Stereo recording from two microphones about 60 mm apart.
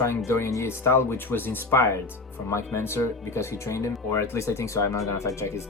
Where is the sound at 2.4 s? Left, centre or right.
Left.